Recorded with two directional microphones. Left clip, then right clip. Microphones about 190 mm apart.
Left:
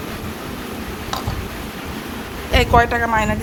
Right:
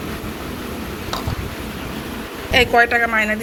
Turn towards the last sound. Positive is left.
turn(degrees=5)  # may be behind; listen again after turning